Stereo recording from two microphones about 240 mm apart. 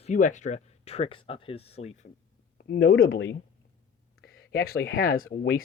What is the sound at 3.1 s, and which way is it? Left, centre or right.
Speech, left.